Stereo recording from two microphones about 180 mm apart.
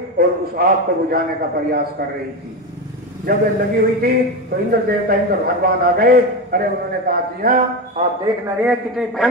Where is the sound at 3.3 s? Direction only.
55° right (ahead or behind).